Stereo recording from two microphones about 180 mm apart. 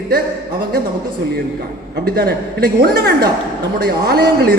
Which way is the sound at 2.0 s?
60° right (ahead or behind).